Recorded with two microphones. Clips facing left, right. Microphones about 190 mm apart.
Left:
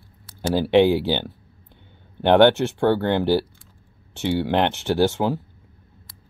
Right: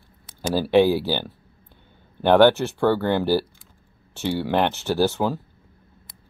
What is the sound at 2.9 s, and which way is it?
Speech, 20° left (ahead or behind).